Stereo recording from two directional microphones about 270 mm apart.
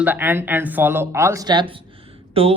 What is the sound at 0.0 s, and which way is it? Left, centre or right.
Speech, centre.